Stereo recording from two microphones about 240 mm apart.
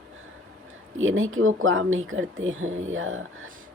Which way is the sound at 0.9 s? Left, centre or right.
Right.